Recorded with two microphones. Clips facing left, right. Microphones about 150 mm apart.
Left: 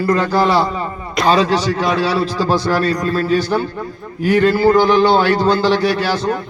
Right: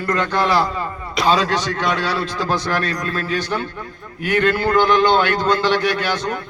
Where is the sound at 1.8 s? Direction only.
35° left (ahead or behind).